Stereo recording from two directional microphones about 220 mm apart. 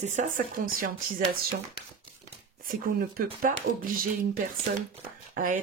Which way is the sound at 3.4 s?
40° right (ahead or behind).